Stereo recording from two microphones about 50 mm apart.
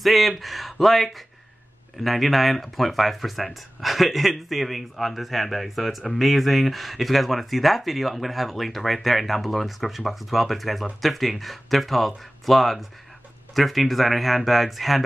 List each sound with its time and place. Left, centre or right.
0.0 s speech: centre